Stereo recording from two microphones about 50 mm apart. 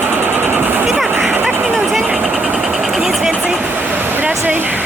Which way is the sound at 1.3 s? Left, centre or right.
Right.